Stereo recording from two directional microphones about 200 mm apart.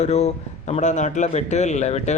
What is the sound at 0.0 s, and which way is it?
Speech, 30° left (ahead or behind).